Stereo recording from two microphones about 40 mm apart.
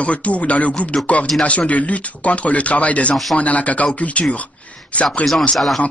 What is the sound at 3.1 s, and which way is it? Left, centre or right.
Speech, centre.